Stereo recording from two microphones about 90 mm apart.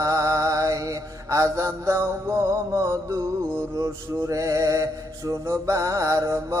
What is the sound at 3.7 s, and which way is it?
Mantra, 35° right (ahead or behind).